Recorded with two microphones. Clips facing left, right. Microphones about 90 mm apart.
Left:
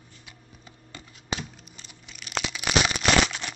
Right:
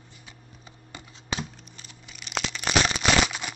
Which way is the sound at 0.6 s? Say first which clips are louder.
Right 1 dB; 20° right (ahead or behind).